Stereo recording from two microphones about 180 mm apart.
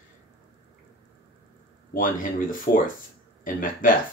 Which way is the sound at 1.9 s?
50° left (ahead or behind).